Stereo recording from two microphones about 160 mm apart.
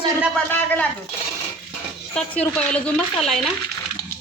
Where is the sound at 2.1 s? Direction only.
5° left (ahead or behind).